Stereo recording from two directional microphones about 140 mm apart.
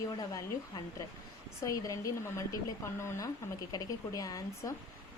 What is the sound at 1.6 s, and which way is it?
Speech, 25° left (ahead or behind).